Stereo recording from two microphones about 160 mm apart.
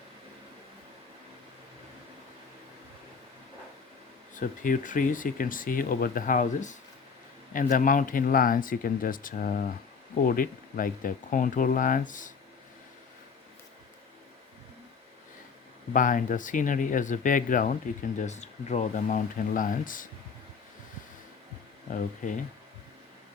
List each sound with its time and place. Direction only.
4.4 s speech: 55° left (ahead or behind)
15.9 s speech: 55° left (ahead or behind)
21.9 s speech: 55° left (ahead or behind)